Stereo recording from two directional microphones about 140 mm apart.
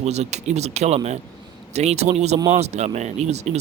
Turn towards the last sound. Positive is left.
turn(degrees=-50)  # may be behind; listen again after turning